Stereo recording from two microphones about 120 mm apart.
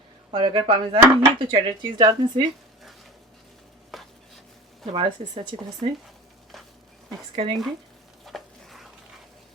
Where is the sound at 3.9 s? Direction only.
Centre (ahead or behind).